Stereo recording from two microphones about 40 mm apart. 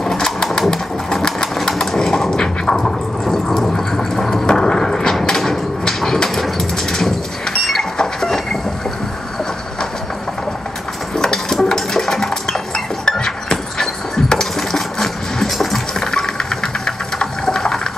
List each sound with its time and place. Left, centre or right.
0.0 s bird: centre
0.6 s sewing machine: centre
2.3 s a sound: centre
11.1 s dishes: centre
13.7 s music: centre
15.9 s engine: centre